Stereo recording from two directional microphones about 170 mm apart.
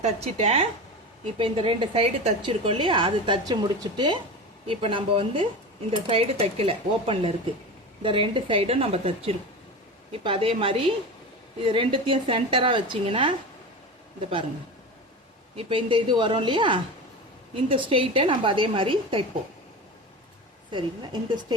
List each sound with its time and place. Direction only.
0.0 s a woman's voice: 40° right (ahead or behind)
15.5 s a woman's voice: 30° right (ahead or behind)
20.7 s a woman's voice: 25° right (ahead or behind)